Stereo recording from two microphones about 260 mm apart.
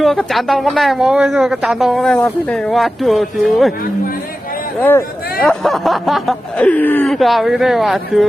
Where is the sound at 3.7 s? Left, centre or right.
Left.